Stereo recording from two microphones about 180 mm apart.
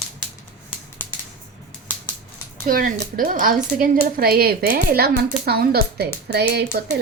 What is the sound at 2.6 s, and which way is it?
Speech, 50° right (ahead or behind).